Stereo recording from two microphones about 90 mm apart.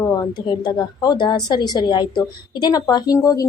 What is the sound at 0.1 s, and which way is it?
A woman's voice, 45° left (ahead or behind).